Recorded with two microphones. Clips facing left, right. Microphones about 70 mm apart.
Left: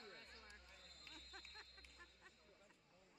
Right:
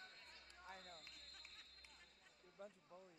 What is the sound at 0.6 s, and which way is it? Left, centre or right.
Basketball bounce, right.